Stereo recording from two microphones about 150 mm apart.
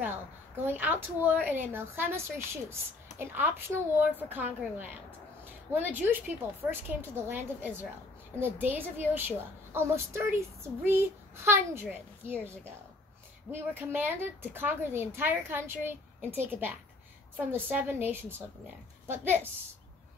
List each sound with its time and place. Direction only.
0.7 s a woman's voice: 10° right (ahead or behind)